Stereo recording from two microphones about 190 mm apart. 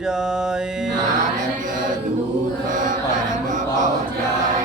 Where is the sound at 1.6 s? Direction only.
40° right (ahead or behind).